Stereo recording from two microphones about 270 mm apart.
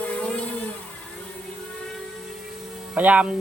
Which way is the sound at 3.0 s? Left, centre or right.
Centre.